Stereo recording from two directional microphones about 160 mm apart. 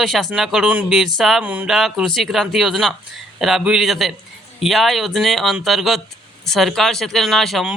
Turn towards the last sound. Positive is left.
turn(degrees=0)  # may be behind; listen again after turning